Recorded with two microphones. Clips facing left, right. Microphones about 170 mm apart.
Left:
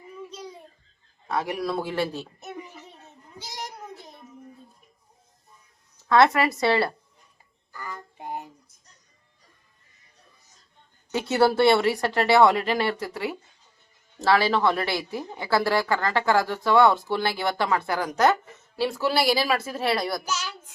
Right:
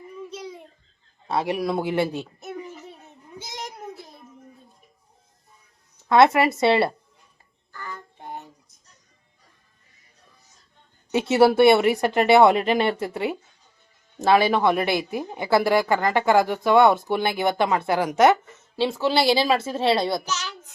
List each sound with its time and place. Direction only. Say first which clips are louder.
1.3 s a woman's voice: right 3 dB; 25° right (ahead or behind)
3.0 s goat: right 3 dB; 20° right (ahead or behind)
6.1 s a woman's voice: right 3 dB; 20° right (ahead or behind)
7.7 s a sound: even; 10° left (ahead or behind)
11.1 s a woman's voice: right 4 dB; 25° right (ahead or behind)
20.2 s a child's voice: even; 10° left (ahead or behind)